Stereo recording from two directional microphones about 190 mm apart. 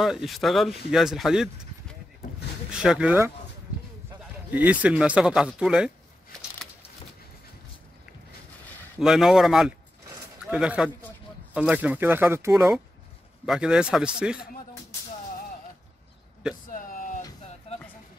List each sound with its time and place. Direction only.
0.0 s speech: centre (ahead or behind)
4.5 s speech: 10° right (ahead or behind)
9.0 s speech: centre (ahead or behind)
16.6 s a sound: 45° left (ahead or behind)
17.7 s music: 30° left (ahead or behind)